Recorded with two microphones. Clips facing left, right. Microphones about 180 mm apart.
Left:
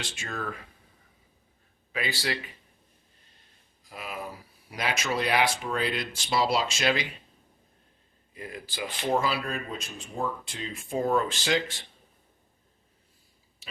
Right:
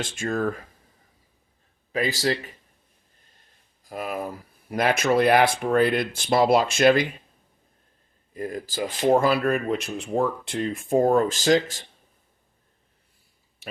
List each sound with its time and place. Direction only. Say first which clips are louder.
0.0 s speech: right 10 dB; 50° right (ahead or behind)
1.9 s speech: right 7 dB; 40° right (ahead or behind)
3.8 s speech: right 8 dB; 50° right (ahead or behind)
8.3 s speech: right 9 dB; 45° right (ahead or behind)
13.6 s a sound: right 10 dB; 60° right (ahead or behind)